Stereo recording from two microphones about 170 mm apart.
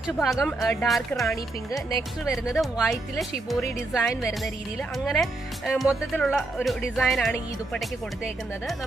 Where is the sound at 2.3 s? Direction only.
Centre (ahead or behind).